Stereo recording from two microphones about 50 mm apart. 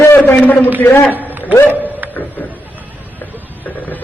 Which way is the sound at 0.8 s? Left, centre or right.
Left.